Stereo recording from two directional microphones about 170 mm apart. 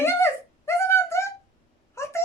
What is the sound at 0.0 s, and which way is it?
Wail, 15° left (ahead or behind).